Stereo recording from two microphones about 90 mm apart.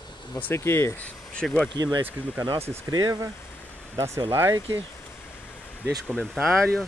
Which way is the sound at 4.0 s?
35° right (ahead or behind).